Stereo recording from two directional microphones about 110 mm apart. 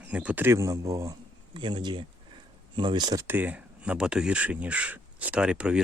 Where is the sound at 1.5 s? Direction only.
45° right (ahead or behind).